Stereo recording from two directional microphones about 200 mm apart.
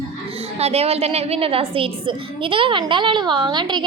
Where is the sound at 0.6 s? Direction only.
30° right (ahead or behind).